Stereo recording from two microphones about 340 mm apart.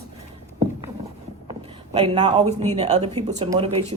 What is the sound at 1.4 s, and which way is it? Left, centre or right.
Speech, centre.